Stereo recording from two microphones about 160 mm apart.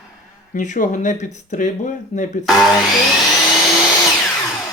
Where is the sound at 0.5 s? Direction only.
50° left (ahead or behind).